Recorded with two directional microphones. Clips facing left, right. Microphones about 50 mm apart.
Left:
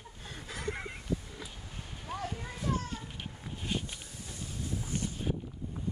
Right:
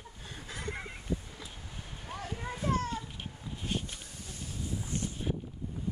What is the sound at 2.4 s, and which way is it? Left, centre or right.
Children playing, centre.